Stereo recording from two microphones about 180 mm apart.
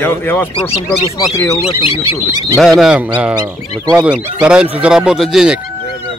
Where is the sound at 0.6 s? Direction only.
35° left (ahead or behind).